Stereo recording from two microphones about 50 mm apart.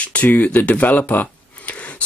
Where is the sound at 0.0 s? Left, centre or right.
Left.